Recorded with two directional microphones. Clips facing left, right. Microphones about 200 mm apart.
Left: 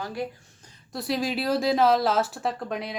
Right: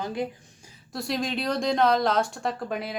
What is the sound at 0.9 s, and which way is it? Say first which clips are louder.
Speech: left 1 dB; centre (ahead or behind).